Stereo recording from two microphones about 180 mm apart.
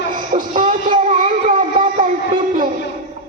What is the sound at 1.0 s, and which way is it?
Music, 45° right (ahead or behind).